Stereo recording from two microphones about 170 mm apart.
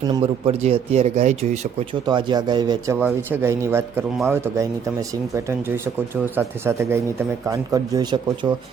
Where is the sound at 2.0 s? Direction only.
25° right (ahead or behind).